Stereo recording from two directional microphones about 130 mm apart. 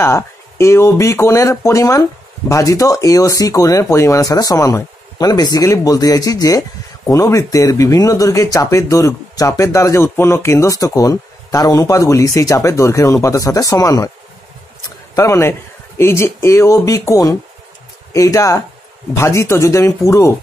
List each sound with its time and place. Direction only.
0.0 s speech: 20° left (ahead or behind)
15.1 s speech: 25° left (ahead or behind)